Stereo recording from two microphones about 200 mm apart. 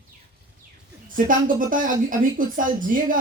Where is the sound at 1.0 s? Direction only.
40° right (ahead or behind).